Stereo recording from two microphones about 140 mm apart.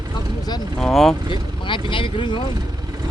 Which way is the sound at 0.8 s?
Centre (ahead or behind).